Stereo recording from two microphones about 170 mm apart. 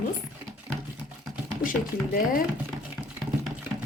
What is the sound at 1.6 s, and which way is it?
Speech, 55° left (ahead or behind).